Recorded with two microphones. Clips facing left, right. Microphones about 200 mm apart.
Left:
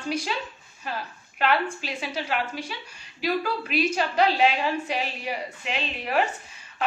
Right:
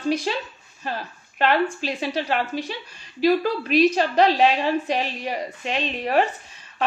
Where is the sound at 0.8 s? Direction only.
40° right (ahead or behind).